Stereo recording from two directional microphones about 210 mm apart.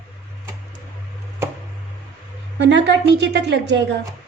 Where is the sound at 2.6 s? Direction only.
55° right (ahead or behind).